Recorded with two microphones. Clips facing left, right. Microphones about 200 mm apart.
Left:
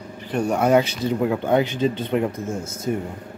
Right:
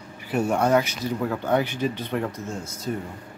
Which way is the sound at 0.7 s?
25° left (ahead or behind).